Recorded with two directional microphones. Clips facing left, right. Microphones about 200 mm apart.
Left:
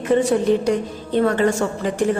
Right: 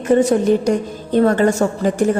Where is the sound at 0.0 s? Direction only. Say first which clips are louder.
Right 3 dB; 45° right (ahead or behind).